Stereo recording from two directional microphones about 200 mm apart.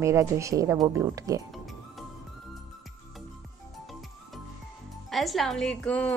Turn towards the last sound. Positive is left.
turn(degrees=5)  # may be behind; listen again after turning